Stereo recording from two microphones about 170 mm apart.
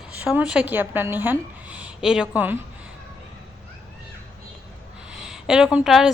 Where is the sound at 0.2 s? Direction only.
10° right (ahead or behind).